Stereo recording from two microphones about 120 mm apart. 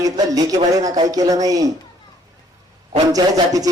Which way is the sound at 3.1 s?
30° right (ahead or behind).